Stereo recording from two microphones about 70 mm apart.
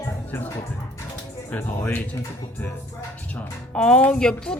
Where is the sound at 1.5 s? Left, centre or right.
Left.